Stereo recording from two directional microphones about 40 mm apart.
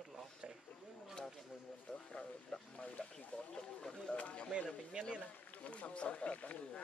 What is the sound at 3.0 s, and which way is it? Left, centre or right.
Wild animals, left.